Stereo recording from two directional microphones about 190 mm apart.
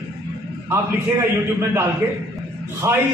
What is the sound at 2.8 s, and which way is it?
Speech, 15° right (ahead or behind).